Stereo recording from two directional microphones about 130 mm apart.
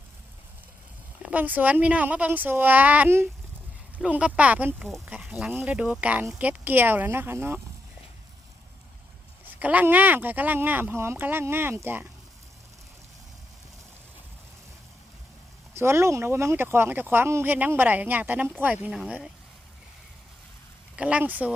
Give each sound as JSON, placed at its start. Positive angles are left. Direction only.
{"t": 1.2, "sound": "speech", "side_deg": -10}
{"t": 9.6, "sound": "speech", "side_deg": -10}
{"t": 15.7, "sound": "speech", "side_deg": -20}
{"t": 20.9, "sound": "speech", "side_deg": -10}